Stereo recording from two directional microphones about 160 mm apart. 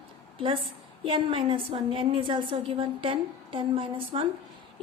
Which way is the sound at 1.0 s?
35° right (ahead or behind).